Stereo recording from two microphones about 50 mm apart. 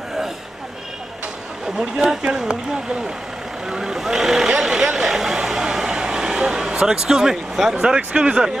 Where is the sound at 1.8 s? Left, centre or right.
Centre.